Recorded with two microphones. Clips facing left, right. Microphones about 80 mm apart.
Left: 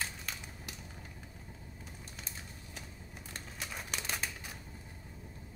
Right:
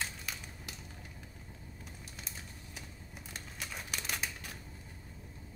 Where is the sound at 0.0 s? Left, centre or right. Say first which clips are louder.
Even; centre.